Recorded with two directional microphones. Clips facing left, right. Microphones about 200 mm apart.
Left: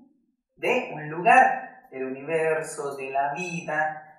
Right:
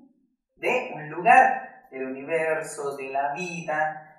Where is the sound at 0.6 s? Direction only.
Centre (ahead or behind).